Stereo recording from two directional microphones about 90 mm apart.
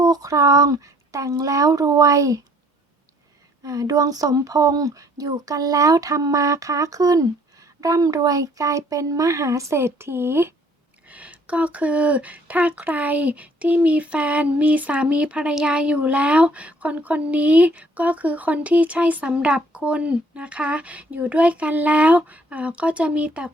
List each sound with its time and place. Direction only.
0.0 s speech: 45° right (ahead or behind)
3.6 s speech: 40° right (ahead or behind); by 10.5 s 25° right (ahead or behind)
11.1 s speech: 15° right (ahead or behind)